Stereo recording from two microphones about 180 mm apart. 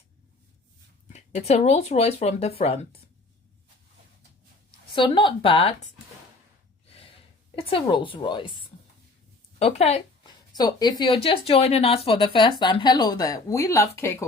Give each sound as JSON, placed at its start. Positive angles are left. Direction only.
{"t": 1.1, "sound": "speech", "side_deg": 40}
{"t": 4.9, "sound": "speech", "side_deg": 25}
{"t": 7.5, "sound": "speech", "side_deg": 30}
{"t": 10.2, "sound": "speech", "side_deg": 20}